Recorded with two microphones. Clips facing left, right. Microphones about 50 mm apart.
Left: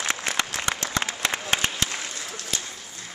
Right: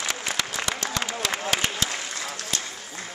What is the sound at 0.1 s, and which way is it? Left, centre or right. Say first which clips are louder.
Applause: left 2 dB; left.